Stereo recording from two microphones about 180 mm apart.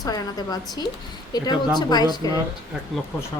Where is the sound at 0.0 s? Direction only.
20° left (ahead or behind).